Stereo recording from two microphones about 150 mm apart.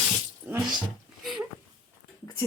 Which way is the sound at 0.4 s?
10° right (ahead or behind).